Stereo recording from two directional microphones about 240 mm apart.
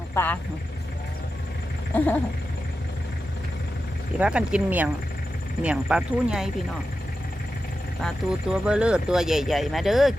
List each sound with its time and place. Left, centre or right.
0.1 s speech: centre
1.9 s a sound: centre
4.2 s speech: centre
8.0 s speech: centre